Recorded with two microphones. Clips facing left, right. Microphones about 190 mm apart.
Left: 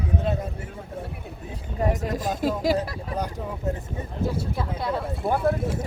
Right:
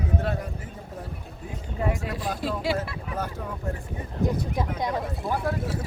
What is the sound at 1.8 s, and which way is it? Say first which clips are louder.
A man's voice: left 3 dB; 40° left (ahead or behind).